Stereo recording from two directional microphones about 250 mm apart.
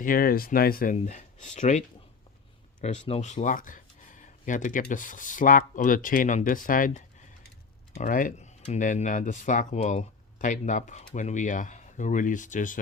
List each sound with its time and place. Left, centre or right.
0.0 s speech: left
2.8 s speech: left